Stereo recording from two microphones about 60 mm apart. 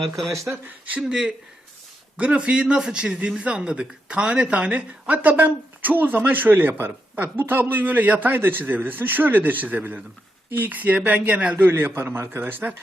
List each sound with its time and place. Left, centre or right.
1.0 s speech: centre
2.1 s a man's voice: right
11.9 s speech: right